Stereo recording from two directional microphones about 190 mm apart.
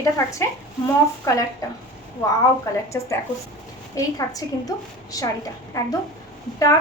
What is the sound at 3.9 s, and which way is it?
A woman's voice, 20° left (ahead or behind).